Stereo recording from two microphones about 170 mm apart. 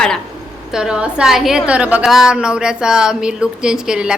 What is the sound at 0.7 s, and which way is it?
A woman's voice, 5° right (ahead or behind).